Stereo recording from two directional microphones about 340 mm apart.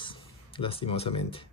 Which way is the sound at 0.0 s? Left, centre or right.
Centre.